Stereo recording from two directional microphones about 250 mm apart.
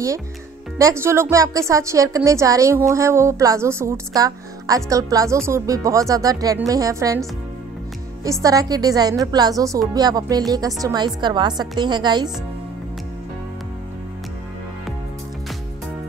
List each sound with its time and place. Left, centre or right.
0.7 s a woman's voice: centre
8.2 s a woman's voice: centre